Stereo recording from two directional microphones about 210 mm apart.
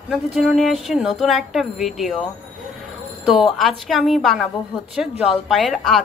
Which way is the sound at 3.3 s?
Centre (ahead or behind).